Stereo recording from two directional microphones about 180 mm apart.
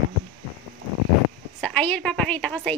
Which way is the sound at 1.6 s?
5° left (ahead or behind).